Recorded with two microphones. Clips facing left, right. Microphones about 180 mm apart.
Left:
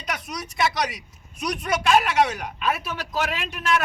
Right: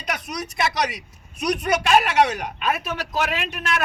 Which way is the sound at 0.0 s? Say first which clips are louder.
Right 2 dB; 70° right (ahead or behind).